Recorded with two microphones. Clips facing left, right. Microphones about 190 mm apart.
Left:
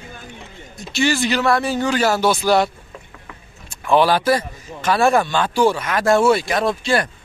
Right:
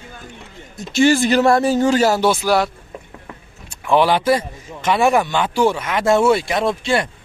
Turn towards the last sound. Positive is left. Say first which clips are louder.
# even
turn(degrees=-25)  # may be behind; listen again after turning